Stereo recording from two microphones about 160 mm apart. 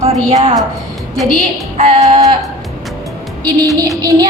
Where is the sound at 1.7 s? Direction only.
40° right (ahead or behind).